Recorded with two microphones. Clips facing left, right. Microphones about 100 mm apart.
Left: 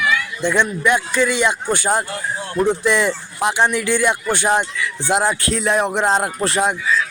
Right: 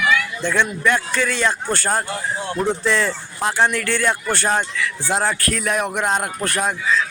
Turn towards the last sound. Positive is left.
turn(degrees=20)  # may be behind; listen again after turning